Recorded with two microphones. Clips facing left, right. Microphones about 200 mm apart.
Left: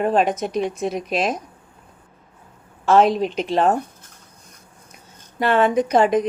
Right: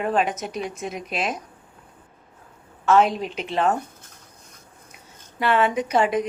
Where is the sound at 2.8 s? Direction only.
35° left (ahead or behind).